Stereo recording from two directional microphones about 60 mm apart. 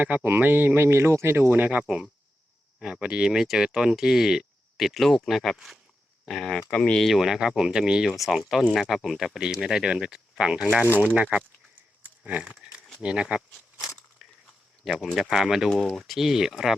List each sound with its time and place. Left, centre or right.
0.0 s speech: right
1.8 s speech: centre
6.7 s speech: centre
7.0 s speech: centre
14.2 s a sound: centre
14.8 s speech: centre